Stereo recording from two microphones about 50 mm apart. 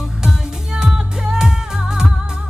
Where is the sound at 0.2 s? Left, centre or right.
Centre.